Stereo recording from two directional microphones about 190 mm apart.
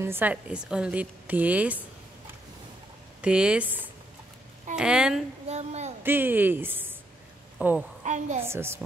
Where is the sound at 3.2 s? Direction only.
5° right (ahead or behind).